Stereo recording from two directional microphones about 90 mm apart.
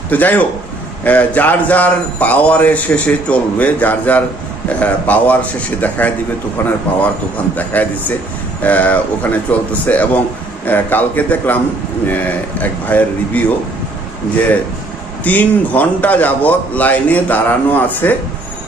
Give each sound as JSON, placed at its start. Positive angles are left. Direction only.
{"t": 0.1, "sound": "a man's voice", "side_deg": 20}
{"t": 15.2, "sound": "a man's voice", "side_deg": 20}